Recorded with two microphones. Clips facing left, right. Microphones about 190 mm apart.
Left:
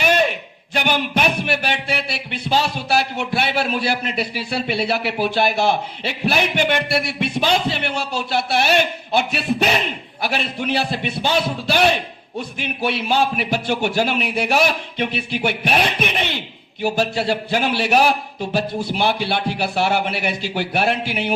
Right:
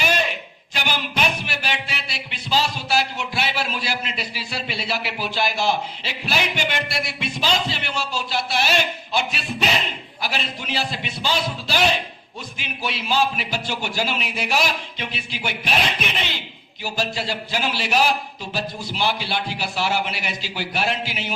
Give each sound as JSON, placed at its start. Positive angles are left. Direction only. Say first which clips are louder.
{"t": 0.0, "sound": "a man's voice", "louder": "left 5 dB", "side_deg": 55}